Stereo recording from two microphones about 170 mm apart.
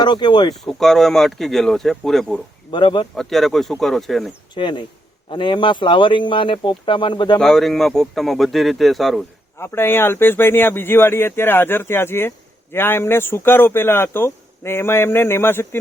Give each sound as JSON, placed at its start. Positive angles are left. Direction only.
{"t": 0.0, "sound": "speech", "side_deg": 25}
{"t": 0.5, "sound": "speech", "side_deg": 0}
{"t": 2.7, "sound": "speech", "side_deg": 30}
{"t": 3.2, "sound": "speech", "side_deg": 0}
{"t": 4.5, "sound": "speech", "side_deg": 25}
{"t": 7.3, "sound": "speech", "side_deg": 0}
{"t": 9.6, "sound": "speech", "side_deg": 15}